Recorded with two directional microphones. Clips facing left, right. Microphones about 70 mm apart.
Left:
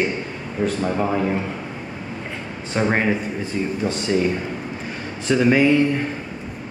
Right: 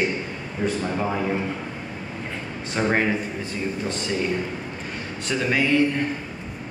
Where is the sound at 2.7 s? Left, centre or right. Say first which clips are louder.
Left 3 dB; centre.